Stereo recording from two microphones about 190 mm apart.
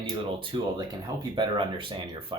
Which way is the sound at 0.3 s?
20° right (ahead or behind).